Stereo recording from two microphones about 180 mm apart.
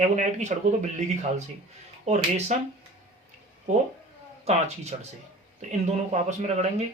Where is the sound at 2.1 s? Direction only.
35° right (ahead or behind).